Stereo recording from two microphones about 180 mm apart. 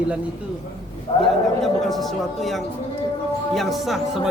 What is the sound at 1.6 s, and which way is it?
Speech, centre (ahead or behind).